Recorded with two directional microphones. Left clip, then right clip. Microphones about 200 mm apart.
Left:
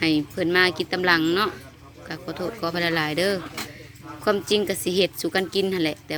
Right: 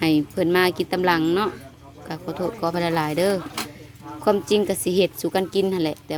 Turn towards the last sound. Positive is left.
turn(degrees=-15)  # may be behind; listen again after turning